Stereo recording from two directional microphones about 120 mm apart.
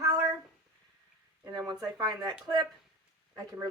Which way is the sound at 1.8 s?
35° right (ahead or behind).